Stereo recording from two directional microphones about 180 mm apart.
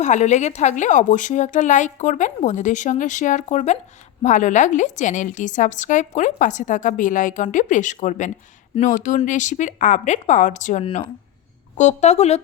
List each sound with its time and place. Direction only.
0.0 s a woman's voice: 40° left (ahead or behind)